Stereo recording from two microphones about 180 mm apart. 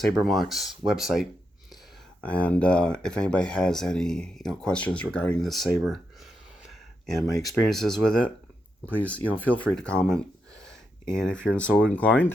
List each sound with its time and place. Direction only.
0.2 s speech: centre (ahead or behind)
7.1 s speech: centre (ahead or behind)